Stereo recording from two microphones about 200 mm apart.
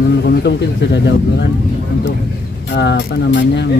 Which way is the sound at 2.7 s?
55° left (ahead or behind).